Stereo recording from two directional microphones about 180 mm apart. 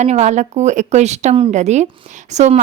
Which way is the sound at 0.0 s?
40° right (ahead or behind).